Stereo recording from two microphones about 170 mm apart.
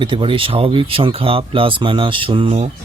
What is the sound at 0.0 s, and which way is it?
Speech, 30° right (ahead or behind).